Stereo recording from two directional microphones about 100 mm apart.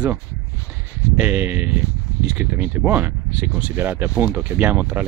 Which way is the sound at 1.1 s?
15° right (ahead or behind).